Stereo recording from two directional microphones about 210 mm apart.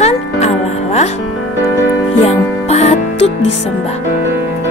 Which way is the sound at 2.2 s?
30° left (ahead or behind).